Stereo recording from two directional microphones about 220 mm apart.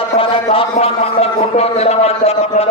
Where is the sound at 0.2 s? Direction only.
25° left (ahead or behind).